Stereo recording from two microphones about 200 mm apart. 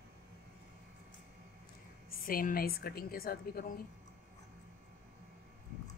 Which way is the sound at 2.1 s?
45° left (ahead or behind).